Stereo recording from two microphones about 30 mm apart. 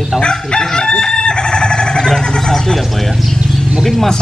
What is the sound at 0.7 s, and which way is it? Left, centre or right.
Chicken, left.